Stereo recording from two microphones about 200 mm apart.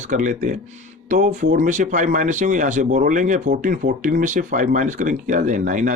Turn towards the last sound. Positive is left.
turn(degrees=-40)  # may be behind; listen again after turning